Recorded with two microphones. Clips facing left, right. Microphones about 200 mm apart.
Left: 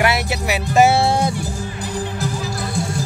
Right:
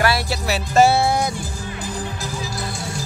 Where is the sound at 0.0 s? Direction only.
20° left (ahead or behind).